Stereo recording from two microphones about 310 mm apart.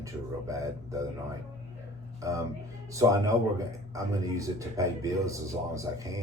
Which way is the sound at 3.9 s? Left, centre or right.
Centre.